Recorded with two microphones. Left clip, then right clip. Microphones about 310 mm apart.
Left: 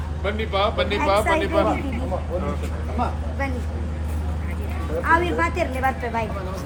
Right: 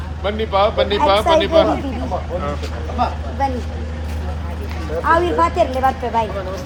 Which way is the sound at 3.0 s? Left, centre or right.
Right.